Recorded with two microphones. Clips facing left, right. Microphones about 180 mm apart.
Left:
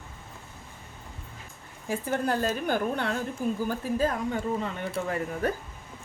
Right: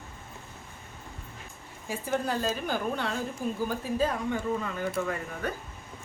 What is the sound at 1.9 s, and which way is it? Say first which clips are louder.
A woman's voice: left 2 dB; 55° left (ahead or behind).